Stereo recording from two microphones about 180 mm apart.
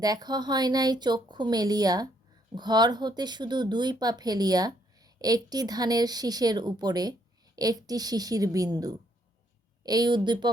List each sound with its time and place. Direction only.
0.0 s speech: 20° right (ahead or behind)